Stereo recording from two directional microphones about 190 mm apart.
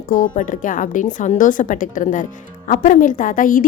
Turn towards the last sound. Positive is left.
turn(degrees=45)  # may be behind; listen again after turning